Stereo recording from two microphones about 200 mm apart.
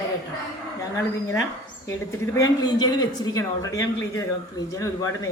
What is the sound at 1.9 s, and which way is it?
Speech, 15° left (ahead or behind).